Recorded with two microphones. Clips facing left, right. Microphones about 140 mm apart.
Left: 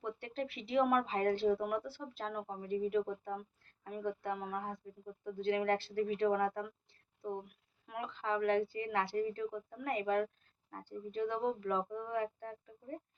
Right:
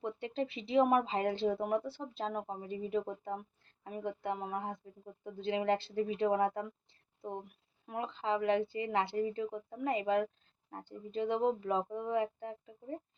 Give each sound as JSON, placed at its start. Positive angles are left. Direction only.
{"t": 0.0, "sound": "speech", "side_deg": -20}